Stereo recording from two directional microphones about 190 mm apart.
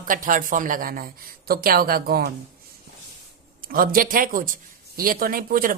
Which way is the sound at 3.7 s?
50° right (ahead or behind).